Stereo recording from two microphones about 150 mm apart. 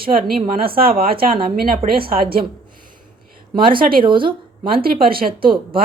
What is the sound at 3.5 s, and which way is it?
Speech, 35° right (ahead or behind).